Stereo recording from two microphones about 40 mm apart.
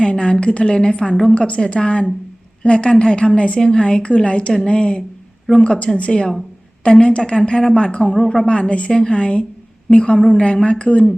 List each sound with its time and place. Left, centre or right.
0.0 s a woman's voice: left
1.4 s a woman's voice: left
8.1 s a woman's voice: centre
8.4 s a woman's voice: left